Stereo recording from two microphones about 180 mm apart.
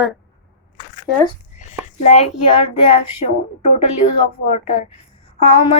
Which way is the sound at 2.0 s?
40° left (ahead or behind).